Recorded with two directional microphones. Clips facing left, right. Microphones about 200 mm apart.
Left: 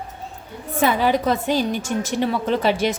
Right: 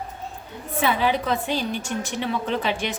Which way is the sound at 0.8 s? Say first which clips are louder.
Left 4 dB; 40° left (ahead or behind).